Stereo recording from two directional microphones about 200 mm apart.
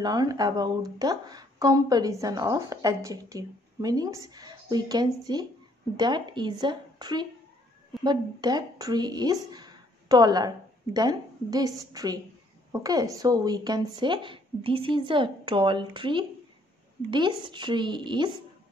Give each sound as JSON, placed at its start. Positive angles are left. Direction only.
{"t": 0.0, "sound": "speech", "side_deg": -20}